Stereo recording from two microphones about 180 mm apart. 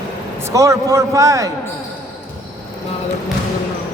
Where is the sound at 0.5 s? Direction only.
20° right (ahead or behind).